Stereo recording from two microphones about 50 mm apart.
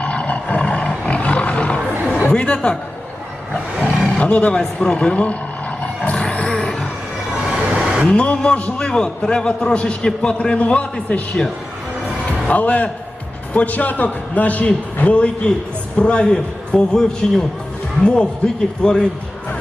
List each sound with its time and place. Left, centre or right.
0.0 s roaring cats: left
2.3 s speech: centre
3.8 s roar: left
4.8 s a man's voice: centre
6.1 s roar: centre
6.6 s a sound: centre
7.5 s a sound: centre
8.0 s a man's voice: left
12.5 s a man's voice: left